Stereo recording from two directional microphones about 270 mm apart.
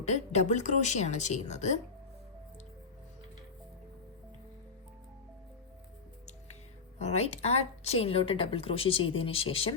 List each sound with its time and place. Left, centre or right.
0.0 s a woman's voice: left
7.0 s a woman's voice: left